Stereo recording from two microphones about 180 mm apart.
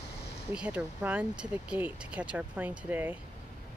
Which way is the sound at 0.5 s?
5° right (ahead or behind).